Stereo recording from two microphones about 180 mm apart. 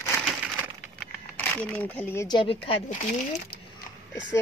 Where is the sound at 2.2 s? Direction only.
25° left (ahead or behind).